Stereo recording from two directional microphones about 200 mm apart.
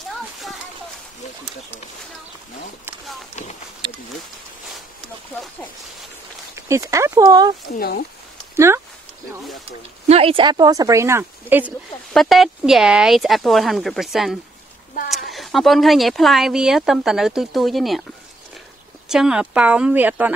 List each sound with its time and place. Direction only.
0.1 s a sound: centre (ahead or behind)
6.5 s speech: 15° right (ahead or behind)
7.7 s speech: 50° left (ahead or behind)
8.5 s speech: 15° right (ahead or behind)
10.0 s speech: 30° right (ahead or behind); by 18.0 s centre (ahead or behind)
19.0 s speech: 5° right (ahead or behind)